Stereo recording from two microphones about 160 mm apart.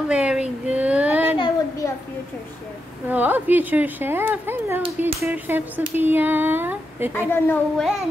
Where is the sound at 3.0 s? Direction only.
10° right (ahead or behind).